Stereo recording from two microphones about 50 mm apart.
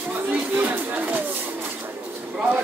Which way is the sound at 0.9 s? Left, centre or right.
Right.